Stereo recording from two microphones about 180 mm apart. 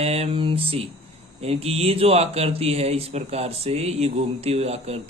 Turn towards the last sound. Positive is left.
turn(degrees=-35)  # may be behind; listen again after turning